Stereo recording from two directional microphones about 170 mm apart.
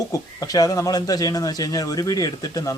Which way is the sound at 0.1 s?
20° left (ahead or behind).